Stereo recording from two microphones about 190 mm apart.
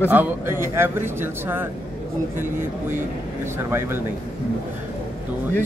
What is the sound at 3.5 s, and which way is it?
Speech, 10° right (ahead or behind).